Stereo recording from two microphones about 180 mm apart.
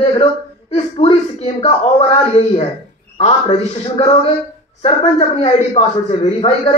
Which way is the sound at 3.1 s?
40° left (ahead or behind).